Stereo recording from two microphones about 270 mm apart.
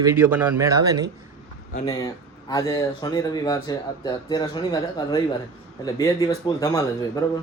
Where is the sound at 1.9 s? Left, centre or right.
Centre.